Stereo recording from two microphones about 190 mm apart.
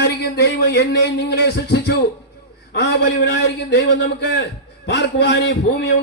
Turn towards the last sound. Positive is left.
turn(degrees=65)  # may be behind; listen again after turning